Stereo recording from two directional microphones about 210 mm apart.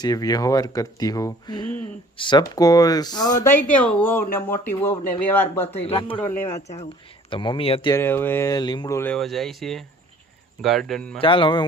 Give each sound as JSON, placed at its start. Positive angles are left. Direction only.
{"t": 0.0, "sound": "speech", "side_deg": 20}
{"t": 3.4, "sound": "speech", "side_deg": 10}
{"t": 5.8, "sound": "a man's voice", "side_deg": 25}
{"t": 7.3, "sound": "speech", "side_deg": 25}
{"t": 11.2, "sound": "a man's voice", "side_deg": 25}